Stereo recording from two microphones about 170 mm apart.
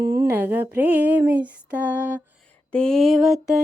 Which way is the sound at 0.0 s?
15° right (ahead or behind).